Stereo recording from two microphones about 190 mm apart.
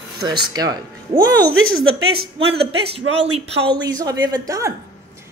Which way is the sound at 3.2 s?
25° right (ahead or behind).